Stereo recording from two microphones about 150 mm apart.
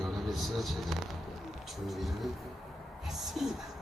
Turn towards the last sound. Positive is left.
turn(degrees=0)  # may be behind; listen again after turning